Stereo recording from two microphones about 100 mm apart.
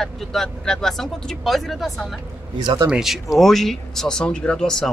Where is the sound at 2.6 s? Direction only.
50° right (ahead or behind).